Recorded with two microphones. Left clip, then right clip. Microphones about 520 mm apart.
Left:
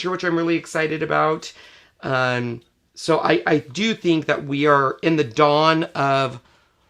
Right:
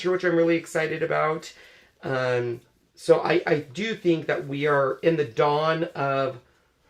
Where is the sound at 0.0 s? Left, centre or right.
Left.